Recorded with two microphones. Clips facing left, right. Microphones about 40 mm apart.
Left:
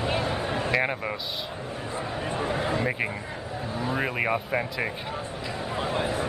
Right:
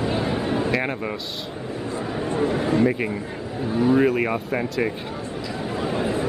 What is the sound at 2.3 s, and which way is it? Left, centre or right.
Speech, centre.